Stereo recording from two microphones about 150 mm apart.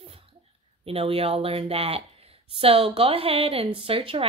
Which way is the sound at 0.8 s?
40° right (ahead or behind).